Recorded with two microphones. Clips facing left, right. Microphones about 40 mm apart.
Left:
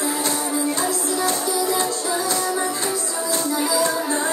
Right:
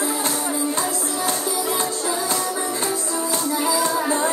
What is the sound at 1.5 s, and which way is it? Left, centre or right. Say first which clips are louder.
Music: left 2 dB; right.